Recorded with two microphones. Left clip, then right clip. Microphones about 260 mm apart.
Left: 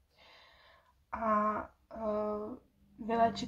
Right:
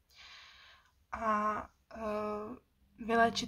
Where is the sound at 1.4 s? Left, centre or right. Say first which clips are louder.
Left 1 dB; right.